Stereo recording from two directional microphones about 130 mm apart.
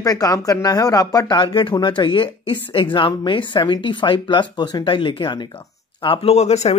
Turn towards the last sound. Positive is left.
turn(degrees=55)  # may be behind; listen again after turning